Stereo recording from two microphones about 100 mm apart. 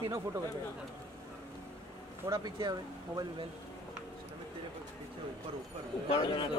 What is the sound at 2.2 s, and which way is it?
Speech, 40° right (ahead or behind).